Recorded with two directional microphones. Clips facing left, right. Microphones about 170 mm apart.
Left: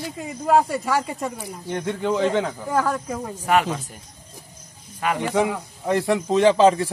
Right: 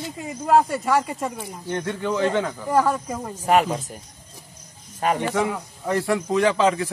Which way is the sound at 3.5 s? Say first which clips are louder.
Right 1 dB; 35° right (ahead or behind).